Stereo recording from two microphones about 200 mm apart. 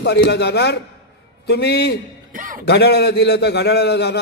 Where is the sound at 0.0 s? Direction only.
55° left (ahead or behind).